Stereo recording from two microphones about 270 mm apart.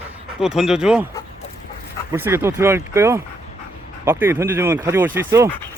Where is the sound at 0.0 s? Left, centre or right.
Centre.